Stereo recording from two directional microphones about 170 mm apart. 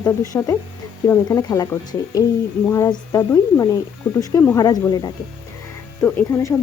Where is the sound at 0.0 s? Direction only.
20° left (ahead or behind).